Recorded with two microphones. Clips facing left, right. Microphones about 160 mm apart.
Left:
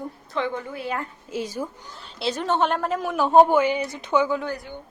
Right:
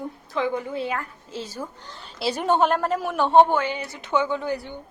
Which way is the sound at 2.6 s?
Centre (ahead or behind).